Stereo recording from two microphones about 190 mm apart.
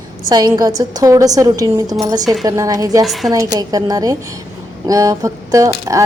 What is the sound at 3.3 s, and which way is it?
A woman's voice, 20° right (ahead or behind).